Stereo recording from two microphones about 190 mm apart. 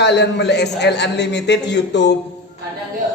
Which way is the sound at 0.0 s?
65° left (ahead or behind).